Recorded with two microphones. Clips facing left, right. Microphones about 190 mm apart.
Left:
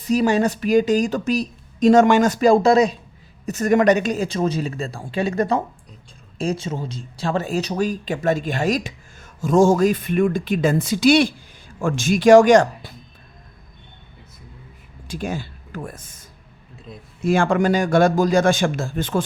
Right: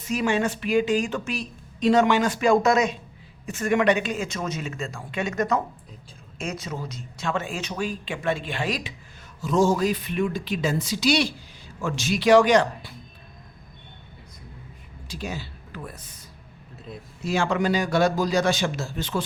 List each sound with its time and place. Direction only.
0.1 s a woman's voice: 35° left (ahead or behind)
15.0 s speech: 50° left (ahead or behind)
17.2 s a man's voice: 50° left (ahead or behind)